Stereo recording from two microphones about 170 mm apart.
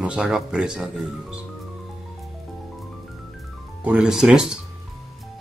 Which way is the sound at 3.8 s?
5° right (ahead or behind).